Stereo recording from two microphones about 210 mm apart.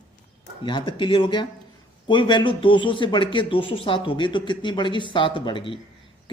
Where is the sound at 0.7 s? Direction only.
20° left (ahead or behind).